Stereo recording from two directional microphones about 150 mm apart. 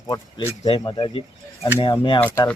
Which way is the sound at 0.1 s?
25° left (ahead or behind).